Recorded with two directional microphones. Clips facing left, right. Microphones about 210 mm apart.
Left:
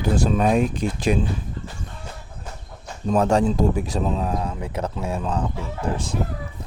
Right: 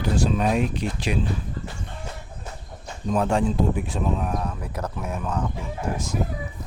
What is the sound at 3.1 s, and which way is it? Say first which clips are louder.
Speech: left 3 dB; 40° left (ahead or behind).